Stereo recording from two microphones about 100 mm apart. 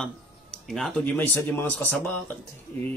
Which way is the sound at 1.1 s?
15° left (ahead or behind).